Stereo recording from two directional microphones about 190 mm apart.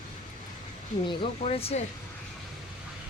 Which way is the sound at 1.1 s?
30° left (ahead or behind).